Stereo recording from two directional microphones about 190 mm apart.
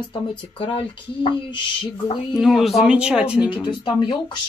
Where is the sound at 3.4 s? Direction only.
25° left (ahead or behind).